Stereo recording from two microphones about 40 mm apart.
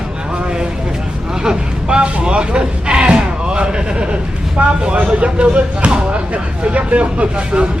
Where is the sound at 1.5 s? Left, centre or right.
Right.